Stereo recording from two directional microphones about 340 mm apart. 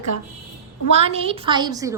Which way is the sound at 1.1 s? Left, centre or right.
Centre.